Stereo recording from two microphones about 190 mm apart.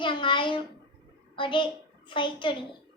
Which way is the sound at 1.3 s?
25° left (ahead or behind).